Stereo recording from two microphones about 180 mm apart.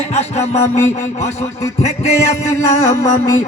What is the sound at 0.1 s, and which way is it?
Music, 40° left (ahead or behind).